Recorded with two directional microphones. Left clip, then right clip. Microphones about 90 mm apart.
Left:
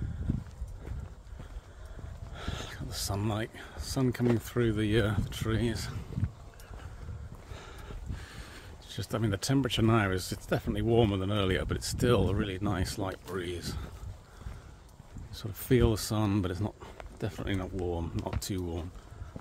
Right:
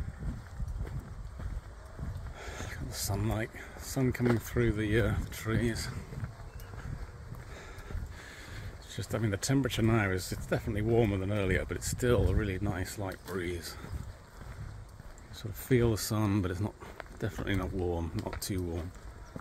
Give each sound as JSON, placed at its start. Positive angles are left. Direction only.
{"t": 2.3, "sound": "a sound", "side_deg": 30}
{"t": 4.4, "sound": "speech", "side_deg": 40}
{"t": 5.3, "sound": "speech", "side_deg": 30}
{"t": 8.3, "sound": "boat", "side_deg": 45}
{"t": 8.8, "sound": "speech", "side_deg": 40}
{"t": 9.4, "sound": "speech", "side_deg": 30}
{"t": 9.7, "sound": "speech", "side_deg": 45}
{"t": 10.9, "sound": "speech", "side_deg": 70}
{"t": 12.5, "sound": "speech", "side_deg": 60}
{"t": 13.4, "sound": "speech", "side_deg": 30}
{"t": 15.9, "sound": "speech", "side_deg": 25}
{"t": 17.2, "sound": "speech", "side_deg": 10}
{"t": 17.6, "sound": "speech", "side_deg": 0}
{"t": 18.4, "sound": "speech", "side_deg": 15}